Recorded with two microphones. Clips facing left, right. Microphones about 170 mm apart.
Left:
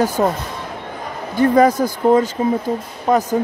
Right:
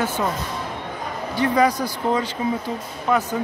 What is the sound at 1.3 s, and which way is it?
Speech, 50° left (ahead or behind).